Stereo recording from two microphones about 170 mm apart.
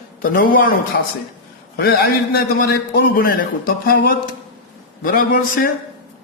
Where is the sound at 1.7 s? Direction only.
70° left (ahead or behind).